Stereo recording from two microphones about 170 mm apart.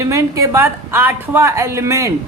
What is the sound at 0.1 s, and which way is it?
A woman's voice, 15° right (ahead or behind).